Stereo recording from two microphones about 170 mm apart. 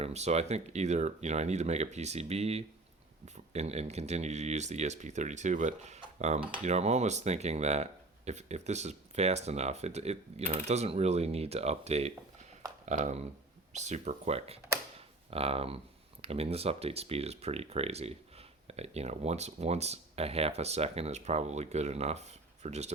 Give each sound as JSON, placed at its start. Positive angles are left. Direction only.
{"t": 0.0, "sound": "speech", "side_deg": -40}
{"t": 6.1, "sound": "cutlery", "side_deg": -40}
{"t": 6.7, "sound": "speech", "side_deg": -40}